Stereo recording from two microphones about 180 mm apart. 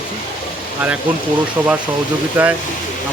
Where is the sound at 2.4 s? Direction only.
10° right (ahead or behind).